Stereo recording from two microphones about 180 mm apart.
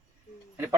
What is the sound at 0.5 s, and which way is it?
Speech, 10° right (ahead or behind).